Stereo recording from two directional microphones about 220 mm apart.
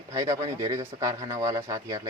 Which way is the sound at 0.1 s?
15° right (ahead or behind).